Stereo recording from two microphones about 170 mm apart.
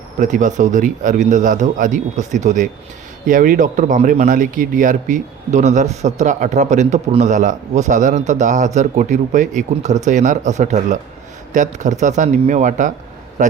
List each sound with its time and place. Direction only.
0.2 s a man's voice: 50° right (ahead or behind)